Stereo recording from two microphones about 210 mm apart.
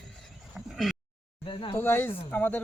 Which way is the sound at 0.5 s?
Centre (ahead or behind).